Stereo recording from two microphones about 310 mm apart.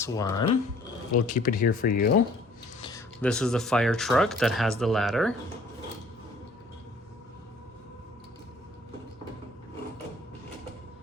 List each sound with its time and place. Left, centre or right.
0.0 s speech: centre
1.1 s speech: left
3.2 s speech: centre